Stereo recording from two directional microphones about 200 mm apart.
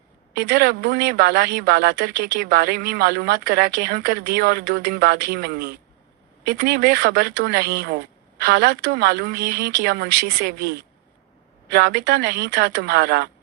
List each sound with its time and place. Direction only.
0.3 s speech: 50° right (ahead or behind)